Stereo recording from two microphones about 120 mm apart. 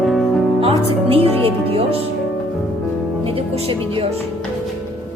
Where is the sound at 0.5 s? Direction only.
50° right (ahead or behind).